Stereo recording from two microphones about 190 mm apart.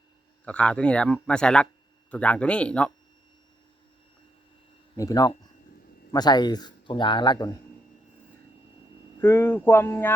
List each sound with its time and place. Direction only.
0.4 s speech: 5° left (ahead or behind)
4.9 s a man's voice: 20° left (ahead or behind)
9.2 s speech: 15° left (ahead or behind)